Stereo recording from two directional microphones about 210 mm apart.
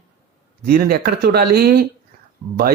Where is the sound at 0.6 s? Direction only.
45° right (ahead or behind).